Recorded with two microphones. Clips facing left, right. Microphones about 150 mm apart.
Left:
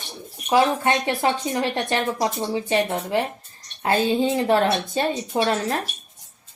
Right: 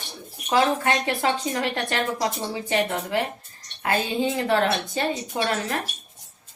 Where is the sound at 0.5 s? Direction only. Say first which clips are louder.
Left 2 dB; 20° left (ahead or behind).